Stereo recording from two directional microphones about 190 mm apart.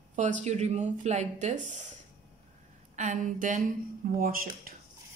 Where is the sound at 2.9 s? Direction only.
40° right (ahead or behind).